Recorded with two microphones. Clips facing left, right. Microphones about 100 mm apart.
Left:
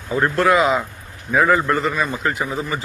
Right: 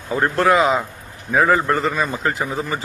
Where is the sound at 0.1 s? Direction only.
30° right (ahead or behind).